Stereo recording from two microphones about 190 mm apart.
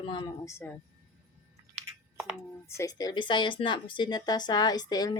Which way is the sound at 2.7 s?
20° left (ahead or behind).